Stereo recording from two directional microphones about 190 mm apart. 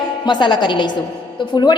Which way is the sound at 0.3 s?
25° left (ahead or behind).